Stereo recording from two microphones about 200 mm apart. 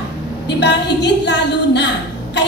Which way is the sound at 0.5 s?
60° left (ahead or behind).